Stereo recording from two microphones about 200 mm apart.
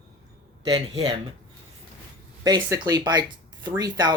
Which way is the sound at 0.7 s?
30° right (ahead or behind).